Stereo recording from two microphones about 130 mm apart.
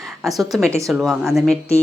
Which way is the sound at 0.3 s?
Centre (ahead or behind).